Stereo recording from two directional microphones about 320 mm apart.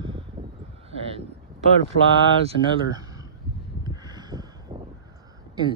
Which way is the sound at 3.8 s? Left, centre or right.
Centre.